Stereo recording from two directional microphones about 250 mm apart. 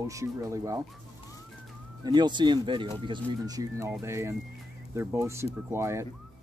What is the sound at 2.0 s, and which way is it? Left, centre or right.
Speech, centre.